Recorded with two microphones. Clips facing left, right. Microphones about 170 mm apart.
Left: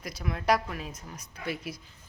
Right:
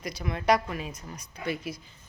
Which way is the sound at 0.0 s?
Centre (ahead or behind).